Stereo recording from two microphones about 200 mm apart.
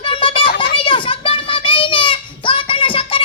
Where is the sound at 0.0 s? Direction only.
25° left (ahead or behind).